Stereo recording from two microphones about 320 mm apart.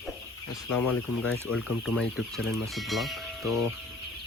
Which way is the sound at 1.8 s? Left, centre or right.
Centre.